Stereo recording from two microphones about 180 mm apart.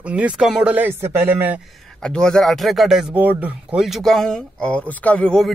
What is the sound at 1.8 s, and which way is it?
A man's voice, 5° left (ahead or behind).